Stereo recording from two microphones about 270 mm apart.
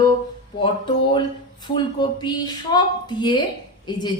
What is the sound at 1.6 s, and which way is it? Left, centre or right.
A woman's voice, centre.